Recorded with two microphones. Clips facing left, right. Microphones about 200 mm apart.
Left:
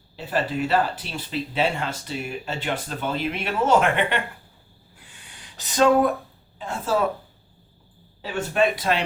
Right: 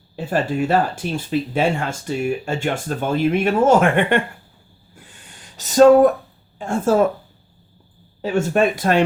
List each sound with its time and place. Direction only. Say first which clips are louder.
0.3 s speech: right 4 dB; 45° right (ahead or behind)
4.9 s a sound: right 4 dB; 45° right (ahead or behind)
6.6 s speech: right 7 dB; 50° right (ahead or behind)
8.2 s speech: right 5 dB; 45° right (ahead or behind)